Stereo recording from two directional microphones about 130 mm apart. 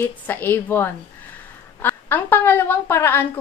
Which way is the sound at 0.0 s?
15° left (ahead or behind).